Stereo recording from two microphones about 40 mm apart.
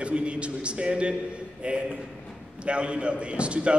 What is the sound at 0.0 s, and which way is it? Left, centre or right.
A man's voice, right.